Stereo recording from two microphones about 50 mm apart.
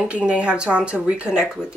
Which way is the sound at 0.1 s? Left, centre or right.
Right.